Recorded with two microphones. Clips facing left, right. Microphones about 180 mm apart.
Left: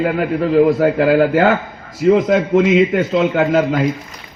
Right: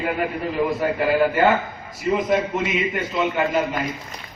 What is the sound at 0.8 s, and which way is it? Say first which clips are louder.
A man's voice: left 7 dB; 75° left (ahead or behind).